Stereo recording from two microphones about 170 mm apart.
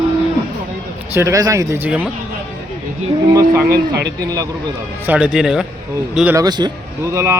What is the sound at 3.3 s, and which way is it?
Speech, 20° right (ahead or behind).